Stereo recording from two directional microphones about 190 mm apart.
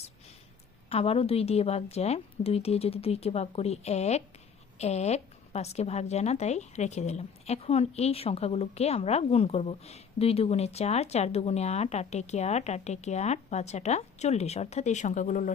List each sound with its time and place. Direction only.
0.9 s a woman's voice: 30° left (ahead or behind)